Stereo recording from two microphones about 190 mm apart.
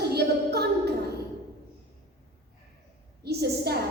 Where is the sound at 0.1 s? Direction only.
60° right (ahead or behind).